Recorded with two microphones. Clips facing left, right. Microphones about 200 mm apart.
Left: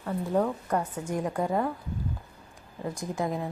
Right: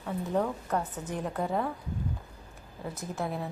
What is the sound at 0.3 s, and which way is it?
A woman's voice, 10° left (ahead or behind).